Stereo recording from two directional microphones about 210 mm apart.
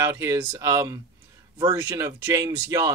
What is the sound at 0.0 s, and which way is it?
Speech, 15° right (ahead or behind).